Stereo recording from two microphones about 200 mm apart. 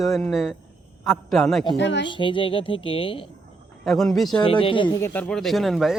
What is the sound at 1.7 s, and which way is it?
Speech, 60° left (ahead or behind).